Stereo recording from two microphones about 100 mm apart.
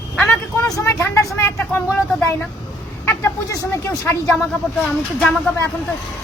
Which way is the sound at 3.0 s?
30° left (ahead or behind).